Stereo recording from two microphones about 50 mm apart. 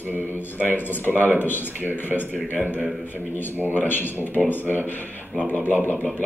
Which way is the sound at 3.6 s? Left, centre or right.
Left.